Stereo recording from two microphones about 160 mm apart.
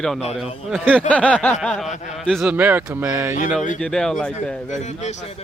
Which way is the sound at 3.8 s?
5° left (ahead or behind).